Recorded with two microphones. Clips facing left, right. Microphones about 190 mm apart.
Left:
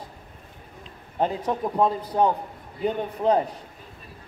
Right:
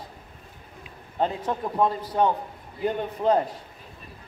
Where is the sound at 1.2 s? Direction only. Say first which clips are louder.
Left 1 dB; 15° left (ahead or behind).